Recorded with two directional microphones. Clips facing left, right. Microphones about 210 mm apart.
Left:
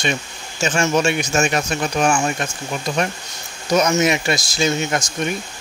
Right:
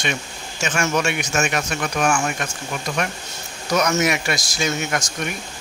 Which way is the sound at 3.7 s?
25° left (ahead or behind).